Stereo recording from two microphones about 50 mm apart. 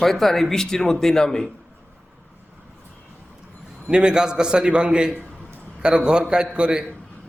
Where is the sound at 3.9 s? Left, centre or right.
Centre.